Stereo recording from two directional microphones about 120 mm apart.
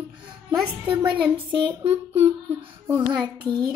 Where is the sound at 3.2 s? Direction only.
40° right (ahead or behind).